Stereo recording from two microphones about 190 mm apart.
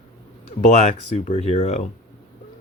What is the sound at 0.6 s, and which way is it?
Speech, 40° left (ahead or behind).